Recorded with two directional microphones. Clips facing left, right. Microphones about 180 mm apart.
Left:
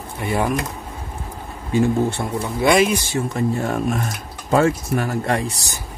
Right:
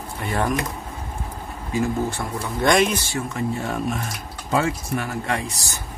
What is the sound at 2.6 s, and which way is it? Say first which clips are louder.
Speech: left 2 dB; 5° left (ahead or behind).